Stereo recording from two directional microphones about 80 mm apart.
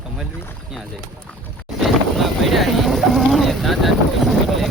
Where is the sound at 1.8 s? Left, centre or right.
Centre.